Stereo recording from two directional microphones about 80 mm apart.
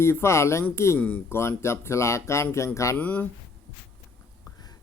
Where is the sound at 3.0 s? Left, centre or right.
Centre.